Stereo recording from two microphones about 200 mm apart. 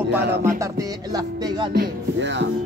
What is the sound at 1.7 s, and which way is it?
Music, 55° right (ahead or behind).